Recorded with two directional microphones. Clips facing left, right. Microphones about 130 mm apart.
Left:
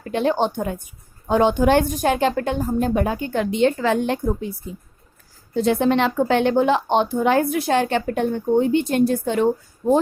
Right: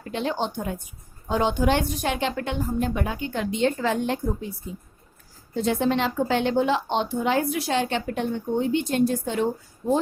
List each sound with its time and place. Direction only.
0.1 s a woman's voice: 55° left (ahead or behind); by 4.4 s 75° left (ahead or behind)
5.6 s a woman's voice: 65° left (ahead or behind)
9.8 s a woman's voice: 50° left (ahead or behind)